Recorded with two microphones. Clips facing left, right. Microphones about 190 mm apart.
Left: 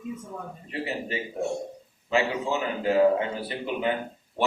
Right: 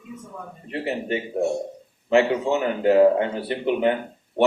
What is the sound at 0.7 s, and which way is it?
A man's voice, 60° right (ahead or behind).